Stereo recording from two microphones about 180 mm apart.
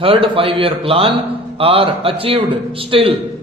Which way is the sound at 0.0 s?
30° right (ahead or behind).